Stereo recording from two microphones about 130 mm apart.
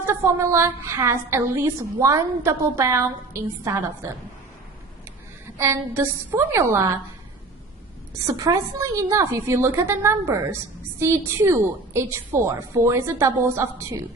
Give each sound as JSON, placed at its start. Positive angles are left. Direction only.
{"t": 0.0, "sound": "a woman's voice", "side_deg": -20}
{"t": 5.5, "sound": "a woman's voice", "side_deg": -20}
{"t": 8.3, "sound": "a woman's voice", "side_deg": -25}